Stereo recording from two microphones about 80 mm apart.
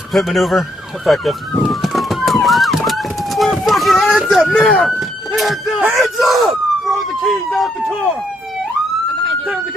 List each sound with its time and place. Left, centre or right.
0.1 s police car: centre
3.6 s speech: centre
4.6 s speech: centre
4.8 s speech: centre